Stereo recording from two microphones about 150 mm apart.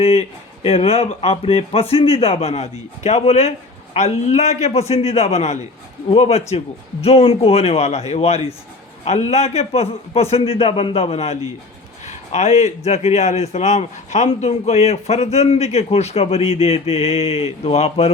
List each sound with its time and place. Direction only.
0.0 s a man's voice: 40° left (ahead or behind)